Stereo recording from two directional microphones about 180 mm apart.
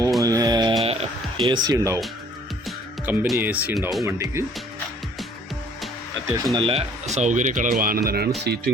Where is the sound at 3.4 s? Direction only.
10° right (ahead or behind).